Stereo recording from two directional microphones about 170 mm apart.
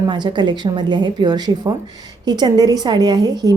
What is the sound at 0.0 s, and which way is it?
A woman's voice, 25° right (ahead or behind).